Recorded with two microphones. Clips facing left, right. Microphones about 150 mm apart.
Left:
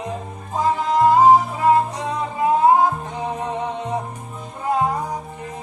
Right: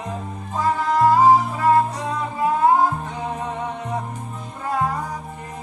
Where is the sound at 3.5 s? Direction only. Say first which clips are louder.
Left 3 dB; 20° left (ahead or behind).